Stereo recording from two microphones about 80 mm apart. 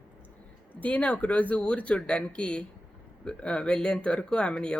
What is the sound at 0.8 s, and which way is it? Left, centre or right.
Speech, centre.